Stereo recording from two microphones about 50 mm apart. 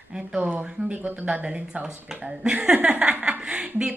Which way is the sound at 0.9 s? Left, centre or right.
Right.